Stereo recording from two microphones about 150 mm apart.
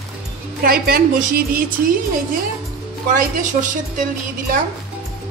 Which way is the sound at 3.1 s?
60° right (ahead or behind).